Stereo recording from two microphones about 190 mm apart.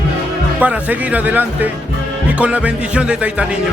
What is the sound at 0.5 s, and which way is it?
Speech, 10° right (ahead or behind).